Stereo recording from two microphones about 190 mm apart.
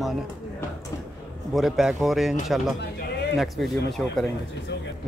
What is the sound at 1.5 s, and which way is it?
Speech, centre (ahead or behind).